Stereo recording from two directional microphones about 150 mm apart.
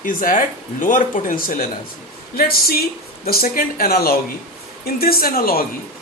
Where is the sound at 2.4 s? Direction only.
85° left.